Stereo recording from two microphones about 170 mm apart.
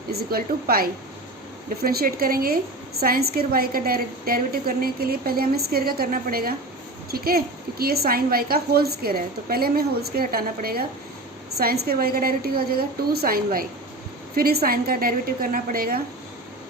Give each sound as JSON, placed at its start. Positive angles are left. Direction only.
{"t": 0.1, "sound": "a woman's voice", "side_deg": -65}